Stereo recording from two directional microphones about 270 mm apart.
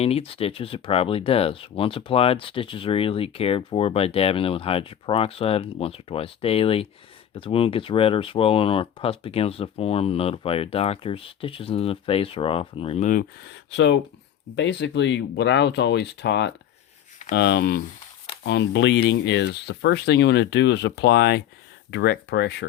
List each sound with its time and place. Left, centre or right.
0.0 s speech: left